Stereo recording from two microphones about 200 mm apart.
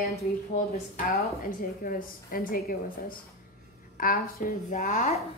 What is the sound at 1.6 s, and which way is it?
A woman's voice, 45° left (ahead or behind).